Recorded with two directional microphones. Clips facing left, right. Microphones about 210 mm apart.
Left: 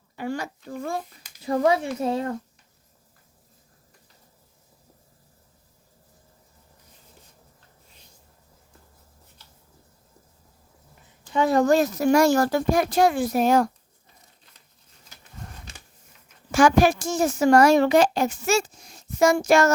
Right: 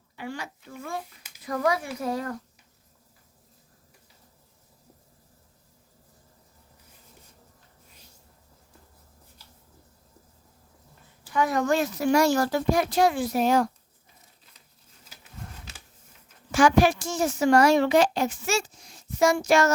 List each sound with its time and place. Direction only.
0.2 s a child's voice: 45° left (ahead or behind)
1.4 s speech: 30° left (ahead or behind)
11.3 s a child's voice: 25° left (ahead or behind); by 13.7 s 50° left (ahead or behind)
15.1 s a sound: 5° right (ahead or behind)
16.5 s a child's voice: 45° left (ahead or behind)